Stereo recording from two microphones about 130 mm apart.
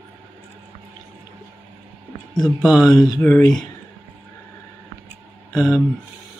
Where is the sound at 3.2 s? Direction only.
10° left (ahead or behind).